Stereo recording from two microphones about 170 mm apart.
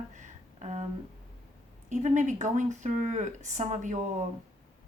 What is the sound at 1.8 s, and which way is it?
A woman's voice, 45° right (ahead or behind).